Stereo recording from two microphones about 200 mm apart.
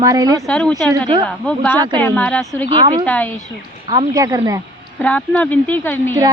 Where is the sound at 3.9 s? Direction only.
20° right (ahead or behind).